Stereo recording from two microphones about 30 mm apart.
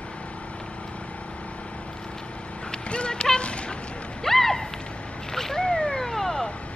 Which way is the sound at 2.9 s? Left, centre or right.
Left.